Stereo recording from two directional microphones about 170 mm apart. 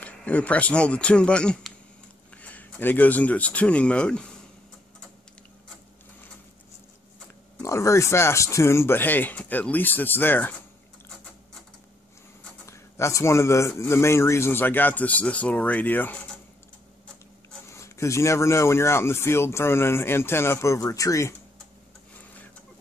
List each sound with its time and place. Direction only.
0.0 s speech: 10° left (ahead or behind)
7.6 s speech: 15° left (ahead or behind)
12.6 s speech: 15° left (ahead or behind)
17.6 s speech: 15° left (ahead or behind)